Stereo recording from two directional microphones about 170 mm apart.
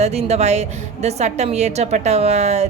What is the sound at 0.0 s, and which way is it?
A woman's voice, 40° right (ahead or behind).